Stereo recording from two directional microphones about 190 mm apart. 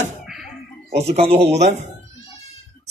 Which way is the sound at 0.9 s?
60° right (ahead or behind).